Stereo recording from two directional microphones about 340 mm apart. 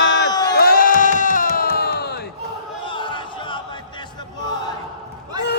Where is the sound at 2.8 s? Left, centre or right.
Centre.